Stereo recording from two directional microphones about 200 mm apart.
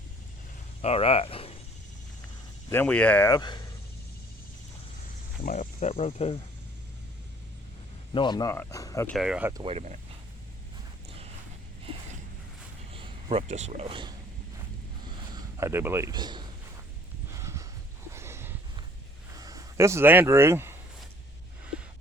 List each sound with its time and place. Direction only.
0.8 s speech: 30° left (ahead or behind)
2.6 s speech: 10° left (ahead or behind)
5.4 s speech: 40° left (ahead or behind)
8.1 s speech: 20° left (ahead or behind)
9.1 s speech: 5° right (ahead or behind)
9.6 s speech: 35° right (ahead or behind)
12.9 s speech: 25° right (ahead or behind)
15.0 s a sound: 20° right (ahead or behind)
19.4 s speech: 15° right (ahead or behind)